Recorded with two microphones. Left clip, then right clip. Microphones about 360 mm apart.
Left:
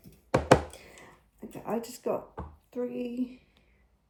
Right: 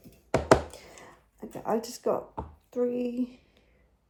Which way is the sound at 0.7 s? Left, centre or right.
Centre.